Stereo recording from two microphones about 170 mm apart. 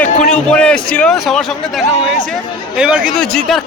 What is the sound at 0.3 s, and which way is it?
A man's voice, 5° left (ahead or behind).